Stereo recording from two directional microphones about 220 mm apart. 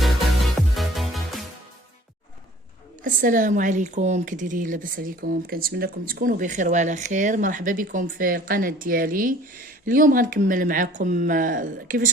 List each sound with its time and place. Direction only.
0.8 s music: centre (ahead or behind)
3.0 s speech: 40° right (ahead or behind)